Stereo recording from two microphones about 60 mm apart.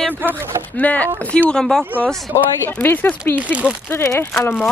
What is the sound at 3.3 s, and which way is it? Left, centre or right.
Speech, right.